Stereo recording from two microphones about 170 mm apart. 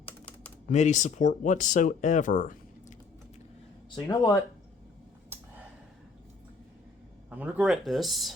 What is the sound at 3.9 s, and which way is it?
Speech, 25° left (ahead or behind).